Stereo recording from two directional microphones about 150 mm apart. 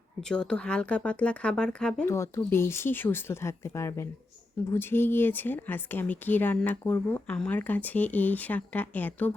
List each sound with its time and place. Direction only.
0.2 s a woman's voice: 5° left (ahead or behind)
2.0 s a woman's voice: 20° left (ahead or behind)